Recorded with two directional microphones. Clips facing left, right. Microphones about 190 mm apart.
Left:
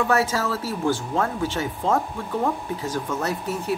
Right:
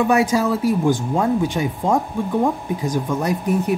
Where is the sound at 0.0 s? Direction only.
15° right (ahead or behind).